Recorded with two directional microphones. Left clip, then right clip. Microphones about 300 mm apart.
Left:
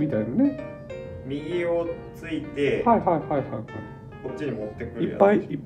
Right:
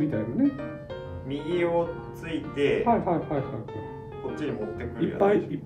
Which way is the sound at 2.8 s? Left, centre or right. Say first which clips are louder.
Left 4 dB; left.